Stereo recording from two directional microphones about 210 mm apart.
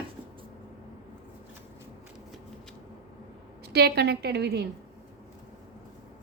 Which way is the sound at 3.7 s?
50° right (ahead or behind).